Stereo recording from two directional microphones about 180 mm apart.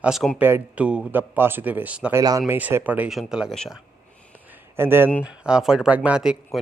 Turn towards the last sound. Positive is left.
turn(degrees=-5)  # may be behind; listen again after turning